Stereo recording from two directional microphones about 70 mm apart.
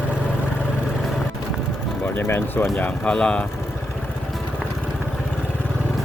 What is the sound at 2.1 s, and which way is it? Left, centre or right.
Speech, left.